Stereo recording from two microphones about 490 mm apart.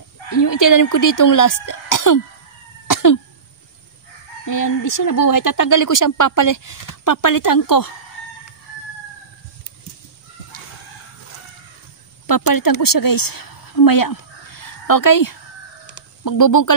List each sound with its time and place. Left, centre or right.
0.3 s a woman's voice: left
2.9 s cough: left
4.5 s a woman's voice: left
12.3 s a woman's voice: left
15.9 s a sound: left